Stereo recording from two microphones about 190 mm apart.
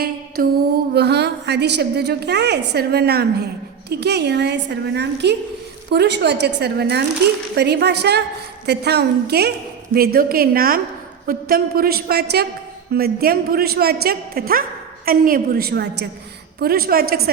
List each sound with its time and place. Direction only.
0.4 s a man's voice: 50° right (ahead or behind)